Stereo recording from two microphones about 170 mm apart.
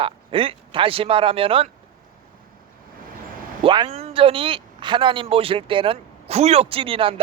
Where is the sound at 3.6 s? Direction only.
30° right (ahead or behind).